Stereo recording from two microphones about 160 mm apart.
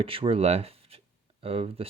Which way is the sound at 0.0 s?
35° right (ahead or behind).